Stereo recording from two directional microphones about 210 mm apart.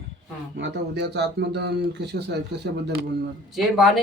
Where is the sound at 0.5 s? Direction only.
55° right (ahead or behind).